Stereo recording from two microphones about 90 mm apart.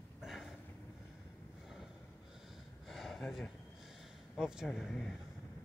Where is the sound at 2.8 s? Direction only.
Centre (ahead or behind).